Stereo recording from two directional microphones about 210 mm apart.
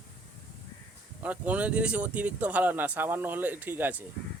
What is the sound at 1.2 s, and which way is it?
Speech, 5° right (ahead or behind).